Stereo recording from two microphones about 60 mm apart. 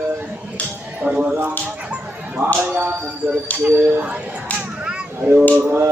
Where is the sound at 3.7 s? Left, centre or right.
Right.